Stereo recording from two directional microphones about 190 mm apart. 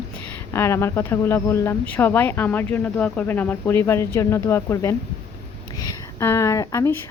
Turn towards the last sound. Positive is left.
turn(degrees=15)  # may be behind; listen again after turning